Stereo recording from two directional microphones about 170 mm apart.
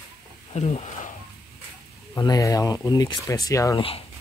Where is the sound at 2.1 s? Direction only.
20° left (ahead or behind).